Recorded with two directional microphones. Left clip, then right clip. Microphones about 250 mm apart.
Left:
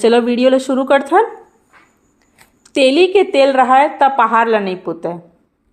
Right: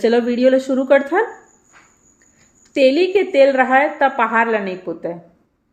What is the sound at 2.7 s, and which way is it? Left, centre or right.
A woman's voice, centre.